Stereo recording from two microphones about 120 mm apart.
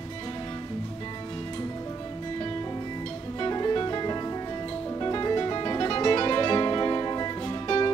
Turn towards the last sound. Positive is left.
turn(degrees=35)  # may be behind; listen again after turning